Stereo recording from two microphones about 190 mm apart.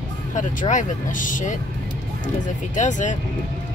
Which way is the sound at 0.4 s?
40° left (ahead or behind).